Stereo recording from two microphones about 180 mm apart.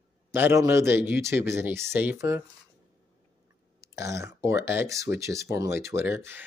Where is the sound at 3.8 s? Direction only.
15° right (ahead or behind).